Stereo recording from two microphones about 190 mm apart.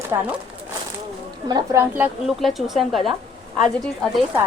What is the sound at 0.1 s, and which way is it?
Speech, 15° right (ahead or behind).